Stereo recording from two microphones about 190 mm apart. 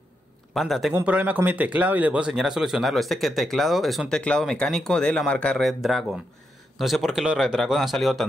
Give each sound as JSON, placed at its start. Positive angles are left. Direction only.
{"t": 0.6, "sound": "speech", "side_deg": 0}